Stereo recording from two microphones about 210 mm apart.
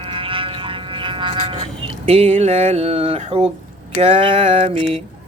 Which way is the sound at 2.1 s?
30° right (ahead or behind).